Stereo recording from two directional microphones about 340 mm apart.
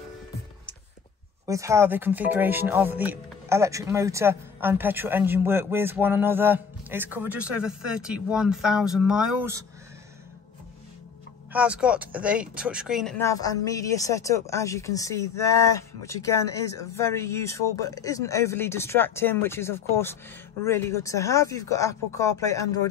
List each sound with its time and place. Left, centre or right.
1.4 s speech: centre
11.5 s speech: centre